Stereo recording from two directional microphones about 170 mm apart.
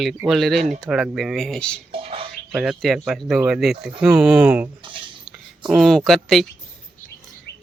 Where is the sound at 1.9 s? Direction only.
35° right (ahead or behind).